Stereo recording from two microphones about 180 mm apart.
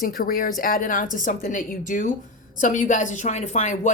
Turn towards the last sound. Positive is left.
turn(degrees=40)  # may be behind; listen again after turning